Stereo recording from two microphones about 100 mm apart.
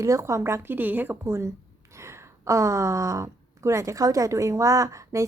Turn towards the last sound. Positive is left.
turn(degrees=-30)  # may be behind; listen again after turning